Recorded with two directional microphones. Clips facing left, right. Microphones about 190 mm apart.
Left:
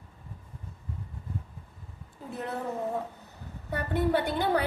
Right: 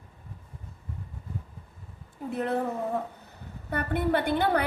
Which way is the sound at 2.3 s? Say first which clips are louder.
Right 6 dB; 60° right (ahead or behind).